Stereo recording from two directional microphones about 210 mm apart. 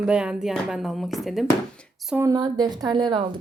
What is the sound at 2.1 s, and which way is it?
A woman's voice, 15° right (ahead or behind).